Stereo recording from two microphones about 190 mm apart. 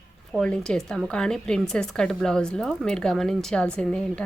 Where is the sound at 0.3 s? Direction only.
5° left (ahead or behind).